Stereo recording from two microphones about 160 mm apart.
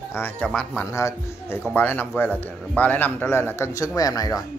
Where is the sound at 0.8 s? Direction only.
20° left (ahead or behind).